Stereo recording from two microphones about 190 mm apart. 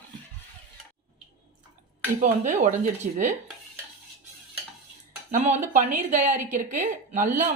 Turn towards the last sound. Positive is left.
turn(degrees=-40)  # may be behind; listen again after turning